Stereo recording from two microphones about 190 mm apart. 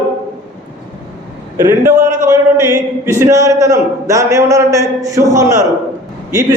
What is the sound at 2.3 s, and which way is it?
A man's voice, 15° right (ahead or behind).